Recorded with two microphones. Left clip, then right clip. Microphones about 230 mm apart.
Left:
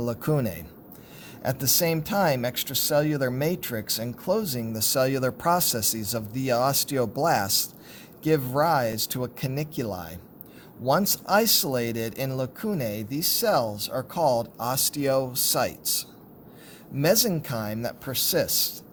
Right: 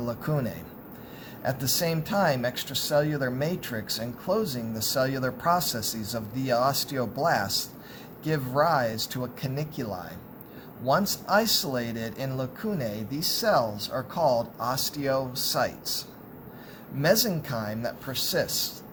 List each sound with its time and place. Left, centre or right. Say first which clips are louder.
0.0 s speech: left 3 dB; left